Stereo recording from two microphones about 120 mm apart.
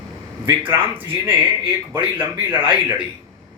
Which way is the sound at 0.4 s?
20° right (ahead or behind).